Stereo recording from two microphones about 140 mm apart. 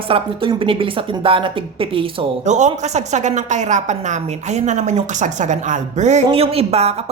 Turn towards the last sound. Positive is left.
turn(degrees=-50)  # may be behind; listen again after turning